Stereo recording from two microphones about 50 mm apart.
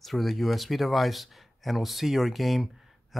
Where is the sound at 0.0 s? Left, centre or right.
Centre.